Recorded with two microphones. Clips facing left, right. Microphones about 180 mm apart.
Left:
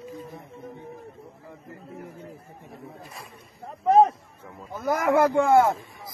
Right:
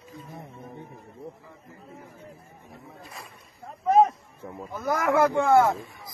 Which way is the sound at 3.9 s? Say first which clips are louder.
Left 2 dB; 30° left (ahead or behind).